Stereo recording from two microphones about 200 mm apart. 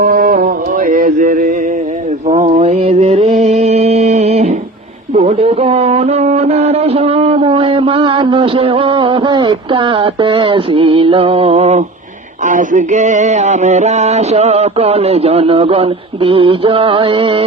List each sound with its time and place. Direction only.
0.0 s music: 45° right (ahead or behind)
2.2 s mantra: 35° right (ahead or behind)
5.1 s speech: 30° right (ahead or behind)
12.5 s a sound: 40° right (ahead or behind)